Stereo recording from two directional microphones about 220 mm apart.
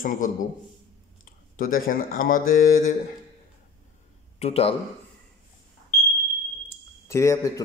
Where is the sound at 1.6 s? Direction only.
40° left (ahead or behind).